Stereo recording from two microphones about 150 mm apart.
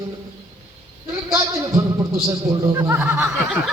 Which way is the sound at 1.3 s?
20° right (ahead or behind).